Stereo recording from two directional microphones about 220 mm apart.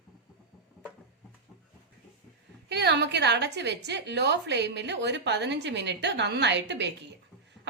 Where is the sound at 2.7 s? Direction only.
50° right (ahead or behind).